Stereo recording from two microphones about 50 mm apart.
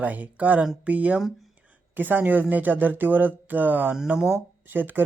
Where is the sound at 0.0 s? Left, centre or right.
Right.